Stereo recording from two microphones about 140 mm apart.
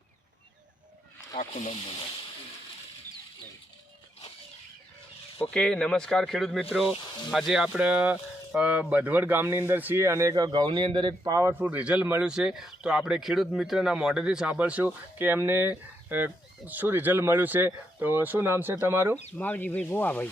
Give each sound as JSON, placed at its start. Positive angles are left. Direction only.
{"t": 1.4, "sound": "speech", "side_deg": 50}
{"t": 5.5, "sound": "speech", "side_deg": 5}
{"t": 6.8, "sound": "speech", "side_deg": 40}
{"t": 7.3, "sound": "speech", "side_deg": 0}
{"t": 19.4, "sound": "speech", "side_deg": 15}